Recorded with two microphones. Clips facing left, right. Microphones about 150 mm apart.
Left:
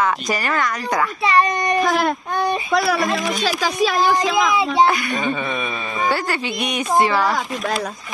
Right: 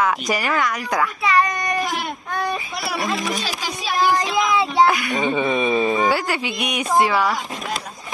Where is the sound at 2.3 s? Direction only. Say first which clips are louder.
Left 4 dB; 25° left (ahead or behind).